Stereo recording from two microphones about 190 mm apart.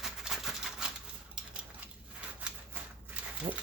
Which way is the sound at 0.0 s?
Centre (ahead or behind).